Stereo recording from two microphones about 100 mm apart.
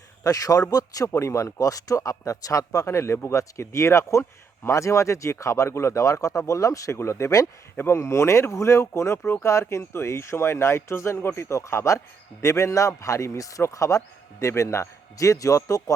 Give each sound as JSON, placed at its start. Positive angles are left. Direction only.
{"t": 0.3, "sound": "speech", "side_deg": 35}